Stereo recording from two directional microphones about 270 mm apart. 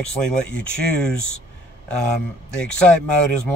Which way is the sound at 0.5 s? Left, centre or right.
Centre.